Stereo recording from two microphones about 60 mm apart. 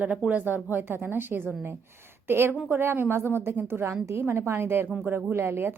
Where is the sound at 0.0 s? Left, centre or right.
Right.